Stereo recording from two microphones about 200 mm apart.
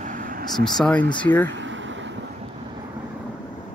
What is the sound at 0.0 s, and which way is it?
Vehicle, 40° right (ahead or behind).